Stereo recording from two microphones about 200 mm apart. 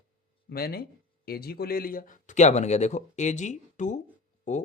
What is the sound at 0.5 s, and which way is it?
Speech, 50° left (ahead or behind).